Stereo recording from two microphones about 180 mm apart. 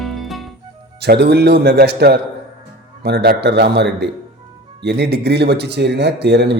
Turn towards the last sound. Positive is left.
turn(degrees=-70)  # may be behind; listen again after turning